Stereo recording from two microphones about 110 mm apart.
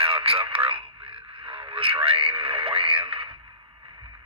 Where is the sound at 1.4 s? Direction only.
55° right (ahead or behind).